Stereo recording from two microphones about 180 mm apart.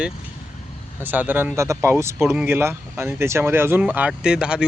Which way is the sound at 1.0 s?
10° right (ahead or behind).